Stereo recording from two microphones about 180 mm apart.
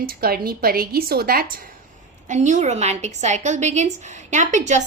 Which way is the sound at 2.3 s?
40° right (ahead or behind).